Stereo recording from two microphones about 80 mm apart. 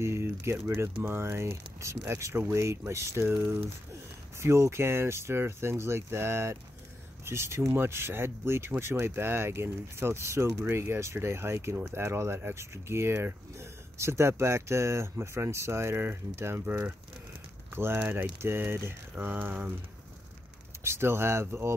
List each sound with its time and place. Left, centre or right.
0.0 s speech: right
20.8 s speech: right